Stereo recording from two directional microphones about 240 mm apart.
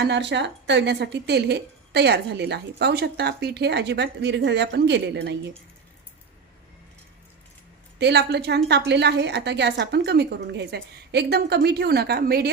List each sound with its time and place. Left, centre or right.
0.0 s speech: right
7.9 s speech: right